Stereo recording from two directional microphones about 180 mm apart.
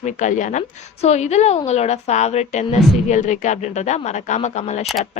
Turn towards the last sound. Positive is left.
turn(degrees=40)  # may be behind; listen again after turning